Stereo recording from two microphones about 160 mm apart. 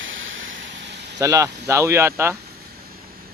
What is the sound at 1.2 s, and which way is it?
Speech, 20° right (ahead or behind).